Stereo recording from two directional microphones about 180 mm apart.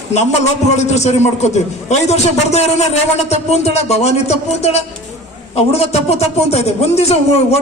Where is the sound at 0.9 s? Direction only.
40° left (ahead or behind).